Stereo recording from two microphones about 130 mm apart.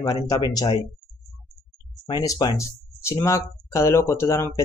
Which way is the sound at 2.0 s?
30° left (ahead or behind).